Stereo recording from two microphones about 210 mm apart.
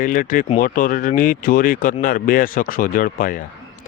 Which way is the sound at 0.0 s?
40° left (ahead or behind).